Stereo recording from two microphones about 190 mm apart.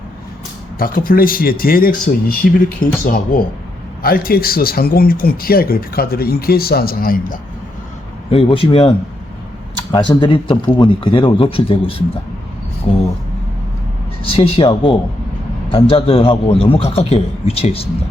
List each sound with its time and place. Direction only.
0.8 s speech: 50° left (ahead or behind)
8.3 s speech: 30° left (ahead or behind)
9.9 s a man's voice: 25° left (ahead or behind)
14.3 s a man's voice: 30° left (ahead or behind)